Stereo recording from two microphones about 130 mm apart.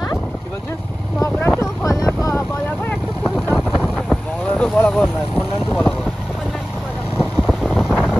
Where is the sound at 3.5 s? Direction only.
5° right (ahead or behind).